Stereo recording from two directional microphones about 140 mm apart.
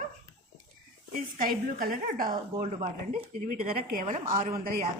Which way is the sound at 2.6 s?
65° right (ahead or behind).